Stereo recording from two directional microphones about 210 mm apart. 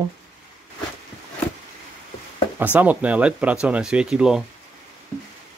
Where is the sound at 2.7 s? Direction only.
5° right (ahead or behind).